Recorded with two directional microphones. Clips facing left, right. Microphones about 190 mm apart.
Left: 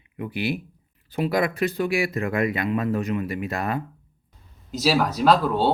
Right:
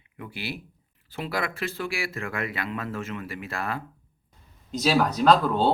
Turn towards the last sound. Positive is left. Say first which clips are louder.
# left 1 dB
turn(degrees=0)  # may be behind; listen again after turning